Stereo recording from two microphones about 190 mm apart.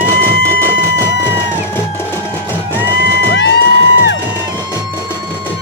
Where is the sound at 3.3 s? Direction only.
65° left (ahead or behind).